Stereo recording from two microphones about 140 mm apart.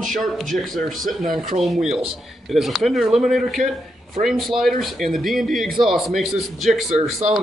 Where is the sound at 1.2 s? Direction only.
75° right (ahead or behind).